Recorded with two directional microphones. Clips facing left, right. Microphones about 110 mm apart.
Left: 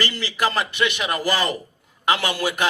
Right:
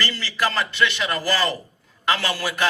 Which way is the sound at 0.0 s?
15° left (ahead or behind).